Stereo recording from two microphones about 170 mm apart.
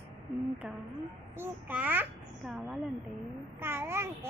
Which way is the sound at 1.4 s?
10° right (ahead or behind).